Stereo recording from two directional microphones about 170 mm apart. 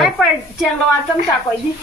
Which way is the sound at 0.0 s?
Centre (ahead or behind).